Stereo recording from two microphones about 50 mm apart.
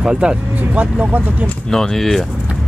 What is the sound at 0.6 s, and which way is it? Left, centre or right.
Speech, right.